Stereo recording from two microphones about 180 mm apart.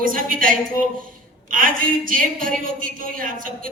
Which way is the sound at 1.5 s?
50° right (ahead or behind).